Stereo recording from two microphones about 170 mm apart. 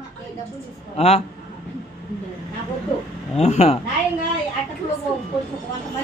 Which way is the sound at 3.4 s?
40° left (ahead or behind).